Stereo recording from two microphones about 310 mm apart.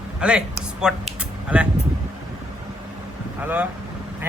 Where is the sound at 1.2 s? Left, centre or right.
Centre.